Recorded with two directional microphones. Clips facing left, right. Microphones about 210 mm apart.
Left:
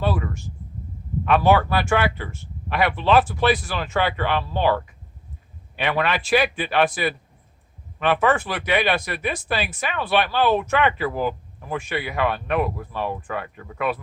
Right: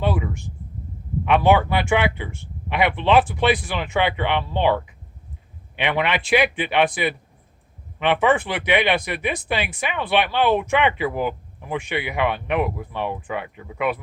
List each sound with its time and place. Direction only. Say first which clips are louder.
0.0 s speech: right 1 dB; 15° right (ahead or behind)